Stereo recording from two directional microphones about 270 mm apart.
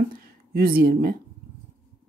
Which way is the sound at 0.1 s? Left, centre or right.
Right.